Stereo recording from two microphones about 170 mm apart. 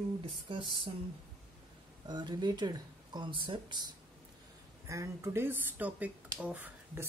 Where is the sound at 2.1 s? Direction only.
25° right (ahead or behind).